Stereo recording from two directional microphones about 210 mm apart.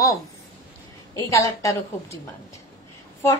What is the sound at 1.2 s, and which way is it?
A woman's voice, 15° left (ahead or behind).